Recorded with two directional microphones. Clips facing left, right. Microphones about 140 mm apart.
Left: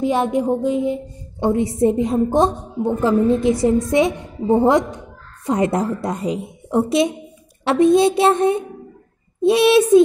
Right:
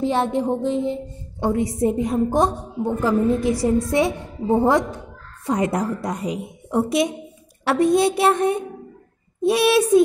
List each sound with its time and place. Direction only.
0.0 s a woman's voice: 15° left (ahead or behind)
1.5 s a woman's voice: 25° left (ahead or behind)